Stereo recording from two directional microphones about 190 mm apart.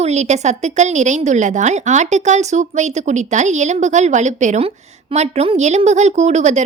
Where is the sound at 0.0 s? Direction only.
35° right (ahead or behind).